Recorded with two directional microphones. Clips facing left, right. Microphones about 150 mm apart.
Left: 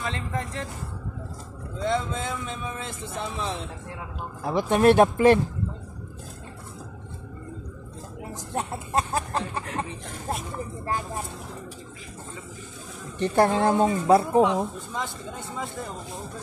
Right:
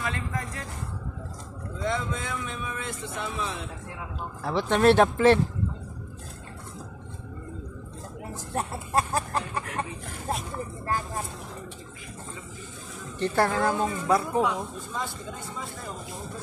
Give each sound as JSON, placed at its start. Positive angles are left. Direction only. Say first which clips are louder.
{"t": 0.0, "sound": "vehicle", "louder": "left 1 dB", "side_deg": 25}
{"t": 1.8, "sound": "speech", "louder": "left 3 dB", "side_deg": 30}
{"t": 4.4, "sound": "speech", "louder": "left 2 dB", "side_deg": 10}
{"t": 8.5, "sound": "chicken", "louder": "even", "side_deg": 25}
{"t": 13.2, "sound": "speech", "louder": "left 3 dB", "side_deg": 20}